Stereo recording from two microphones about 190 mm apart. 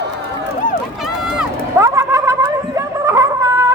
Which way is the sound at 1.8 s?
15° right (ahead or behind).